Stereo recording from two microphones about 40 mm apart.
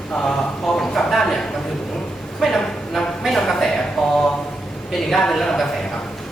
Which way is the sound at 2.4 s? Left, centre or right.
Centre.